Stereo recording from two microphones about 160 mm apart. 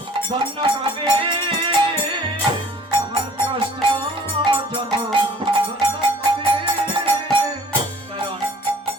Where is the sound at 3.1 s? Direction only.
35° right (ahead or behind).